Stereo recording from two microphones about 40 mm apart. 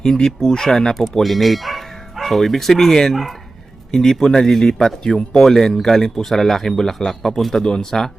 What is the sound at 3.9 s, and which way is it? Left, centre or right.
Speech, centre.